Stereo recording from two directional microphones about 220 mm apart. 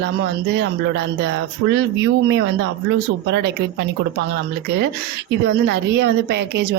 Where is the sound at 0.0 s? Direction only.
50° right (ahead or behind).